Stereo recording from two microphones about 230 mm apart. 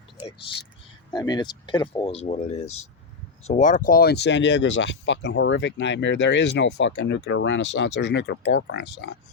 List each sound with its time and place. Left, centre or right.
1.1 s speech: centre; by 9.0 s left